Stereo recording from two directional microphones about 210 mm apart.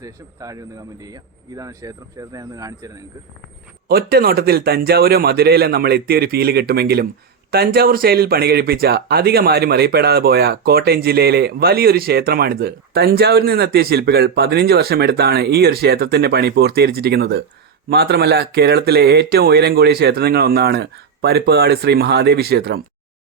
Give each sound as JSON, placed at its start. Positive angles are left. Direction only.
{"t": 0.0, "sound": "speech", "side_deg": -15}
{"t": 3.8, "sound": "speech", "side_deg": -45}